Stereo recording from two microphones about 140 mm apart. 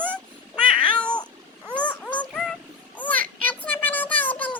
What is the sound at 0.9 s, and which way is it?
Cat, 5° left (ahead or behind).